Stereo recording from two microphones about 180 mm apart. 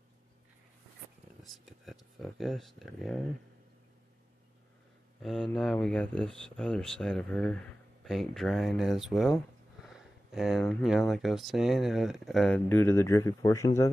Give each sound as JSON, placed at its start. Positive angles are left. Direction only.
{"t": 1.4, "sound": "speech", "side_deg": 0}
{"t": 5.2, "sound": "speech", "side_deg": 0}